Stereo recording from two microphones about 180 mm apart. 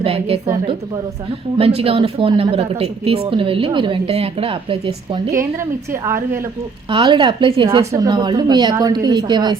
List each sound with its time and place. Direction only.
0.0 s a woman's voice: 35° right (ahead or behind)
6.9 s a woman's voice: 25° right (ahead or behind)